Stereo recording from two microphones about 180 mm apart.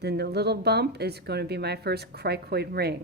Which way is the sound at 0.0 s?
65° right (ahead or behind).